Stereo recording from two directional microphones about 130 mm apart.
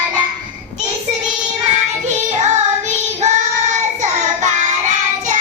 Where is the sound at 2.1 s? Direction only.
65° right (ahead or behind).